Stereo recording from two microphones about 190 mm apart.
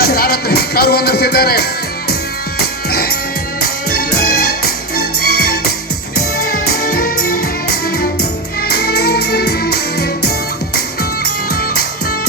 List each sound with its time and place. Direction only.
0.0 s music: 55° left (ahead or behind)